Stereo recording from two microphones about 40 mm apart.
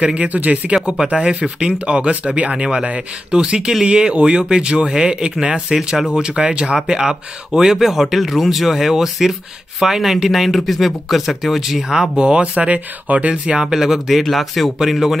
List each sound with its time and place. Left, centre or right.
0.0 s speech: right
0.8 s speech: right; by 12.1 s centre
12.2 s speech: right
13.3 s speech: right; by 15.1 s centre